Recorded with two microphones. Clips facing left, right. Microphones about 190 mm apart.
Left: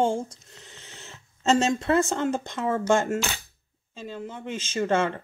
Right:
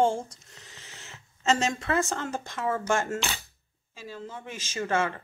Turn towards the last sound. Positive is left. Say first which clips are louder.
# left 4 dB
turn(degrees=20)  # may be behind; listen again after turning